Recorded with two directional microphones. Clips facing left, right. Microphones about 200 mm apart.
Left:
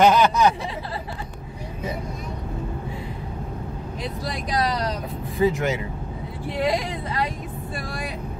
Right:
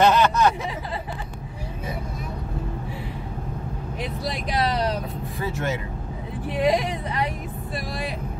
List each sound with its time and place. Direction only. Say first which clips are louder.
0.0 s speech: left 1 dB; 15° left (ahead or behind)
5.4 s speech: left 7 dB; 15° left (ahead or behind)
6.5 s speech: right 2 dB; 20° right (ahead or behind)